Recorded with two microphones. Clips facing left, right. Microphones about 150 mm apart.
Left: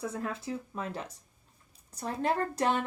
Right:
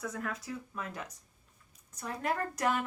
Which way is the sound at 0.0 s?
30° left (ahead or behind).